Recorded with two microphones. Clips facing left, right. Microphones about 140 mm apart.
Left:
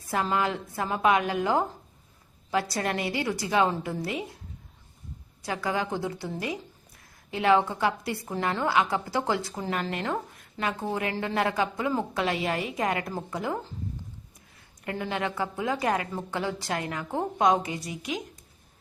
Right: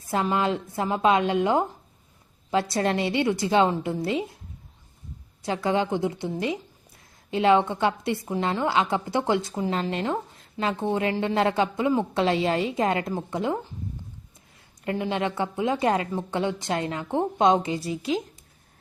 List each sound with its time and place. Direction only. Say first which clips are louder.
0.0 s a woman's voice: right 3 dB; 20° right (ahead or behind)
5.4 s a woman's voice: right 5 dB; 25° right (ahead or behind)
14.8 s a woman's voice: right 4 dB; 20° right (ahead or behind)